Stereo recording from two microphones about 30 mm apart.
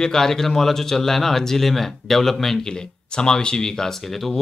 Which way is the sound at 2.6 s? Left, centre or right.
Left.